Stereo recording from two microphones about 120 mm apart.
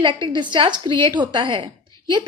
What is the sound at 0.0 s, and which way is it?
A woman's voice, 40° right (ahead or behind).